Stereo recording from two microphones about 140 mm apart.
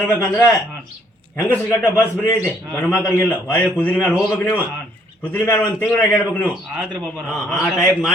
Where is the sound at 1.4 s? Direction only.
10° left (ahead or behind).